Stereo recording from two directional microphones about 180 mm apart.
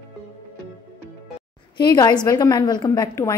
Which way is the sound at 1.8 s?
25° left (ahead or behind).